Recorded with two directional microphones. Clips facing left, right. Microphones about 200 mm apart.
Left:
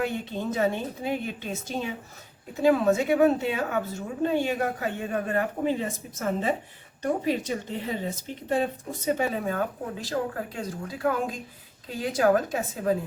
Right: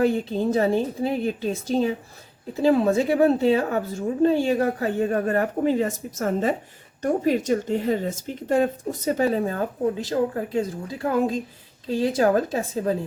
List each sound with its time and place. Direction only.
0.0 s a woman's voice: 35° right (ahead or behind)
10.0 s a woman's voice: 20° right (ahead or behind)